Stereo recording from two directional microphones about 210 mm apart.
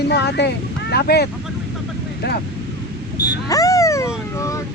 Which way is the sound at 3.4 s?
15° left (ahead or behind).